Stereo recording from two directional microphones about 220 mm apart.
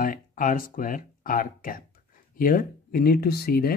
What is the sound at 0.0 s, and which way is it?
Speech, 40° left (ahead or behind).